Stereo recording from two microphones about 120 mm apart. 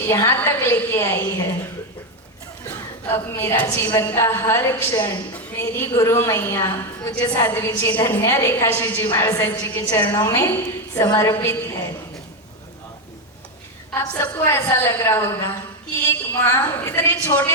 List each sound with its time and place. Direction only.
0.0 s a woman's voice: 20° left (ahead or behind)
2.6 s a woman's voice: 20° left (ahead or behind)
14.1 s a woman's voice: 15° left (ahead or behind)